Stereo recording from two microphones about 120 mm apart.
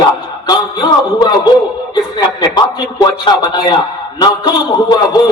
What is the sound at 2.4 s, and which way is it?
Speech, 35° left (ahead or behind).